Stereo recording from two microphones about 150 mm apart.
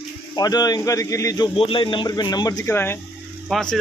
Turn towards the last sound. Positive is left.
turn(degrees=5)  # may be behind; listen again after turning